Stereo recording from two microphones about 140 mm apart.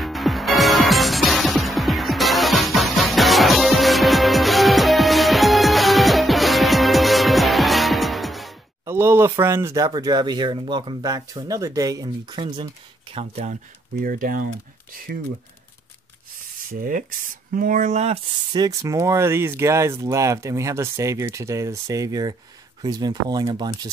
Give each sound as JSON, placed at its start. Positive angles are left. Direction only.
{"t": 0.0, "sound": "music", "side_deg": 0}
{"t": 8.8, "sound": "speech", "side_deg": -15}
{"t": 13.1, "sound": "speech", "side_deg": -50}
{"t": 14.0, "sound": "speech", "side_deg": -85}
{"t": 16.7, "sound": "speech", "side_deg": -80}
{"t": 18.5, "sound": "speech", "side_deg": -25}